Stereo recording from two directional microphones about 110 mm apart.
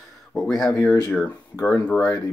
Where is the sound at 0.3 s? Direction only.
Centre (ahead or behind).